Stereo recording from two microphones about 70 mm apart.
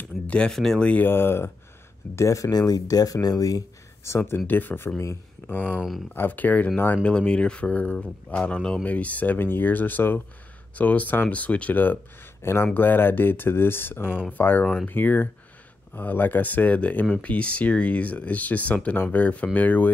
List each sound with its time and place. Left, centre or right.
0.0 s a sound: centre
0.5 s speech: centre
0.8 s speech: left
1.1 s speech: left
2.1 s speech: left
4.1 s speech: left
4.5 s speech: left
5.8 s speech: centre
6.1 s speech: left
7.0 s speech: centre